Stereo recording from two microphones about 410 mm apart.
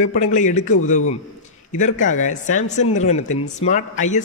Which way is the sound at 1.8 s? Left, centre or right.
Centre.